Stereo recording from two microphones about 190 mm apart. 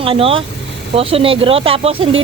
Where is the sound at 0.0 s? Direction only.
30° right (ahead or behind).